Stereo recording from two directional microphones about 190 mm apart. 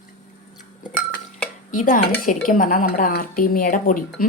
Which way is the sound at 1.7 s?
45° left (ahead or behind).